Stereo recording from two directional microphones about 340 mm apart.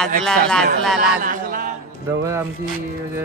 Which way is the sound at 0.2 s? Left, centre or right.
Centre.